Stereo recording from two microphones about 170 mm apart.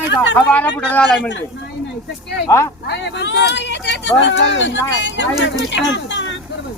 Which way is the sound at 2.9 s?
90° left.